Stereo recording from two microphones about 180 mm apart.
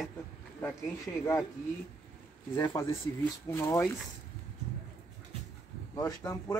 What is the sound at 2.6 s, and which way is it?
Speech, 25° left (ahead or behind).